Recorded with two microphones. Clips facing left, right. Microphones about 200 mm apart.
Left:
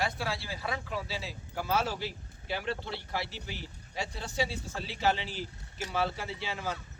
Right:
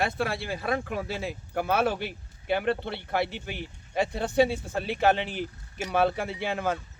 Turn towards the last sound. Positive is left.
turn(degrees=-55)  # may be behind; listen again after turning